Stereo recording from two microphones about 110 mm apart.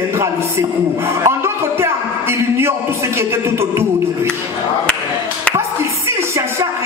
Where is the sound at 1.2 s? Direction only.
25° right (ahead or behind).